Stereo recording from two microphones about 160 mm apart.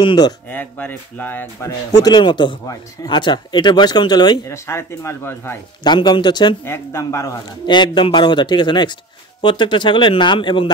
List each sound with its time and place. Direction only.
0.0 s speech: 25° left (ahead or behind)
0.5 s speech: 10° left (ahead or behind)
1.9 s speech: 25° left (ahead or behind)
5.9 s speech: 30° left (ahead or behind)
6.6 s speech: 15° left (ahead or behind)